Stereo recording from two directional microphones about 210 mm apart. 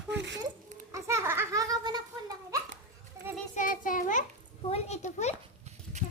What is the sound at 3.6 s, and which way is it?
A child's voice, 40° left (ahead or behind).